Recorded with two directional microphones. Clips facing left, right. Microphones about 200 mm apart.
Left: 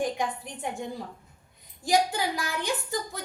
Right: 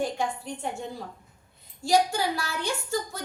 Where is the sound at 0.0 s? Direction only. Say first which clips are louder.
Even; 15° left (ahead or behind).